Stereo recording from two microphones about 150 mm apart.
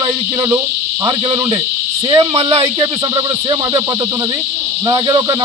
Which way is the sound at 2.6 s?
30° right (ahead or behind).